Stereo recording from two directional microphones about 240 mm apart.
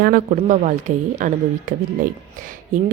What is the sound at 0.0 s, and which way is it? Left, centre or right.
A woman's voice, right.